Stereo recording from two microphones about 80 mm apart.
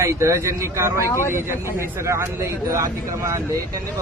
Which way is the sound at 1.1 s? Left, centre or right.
Left.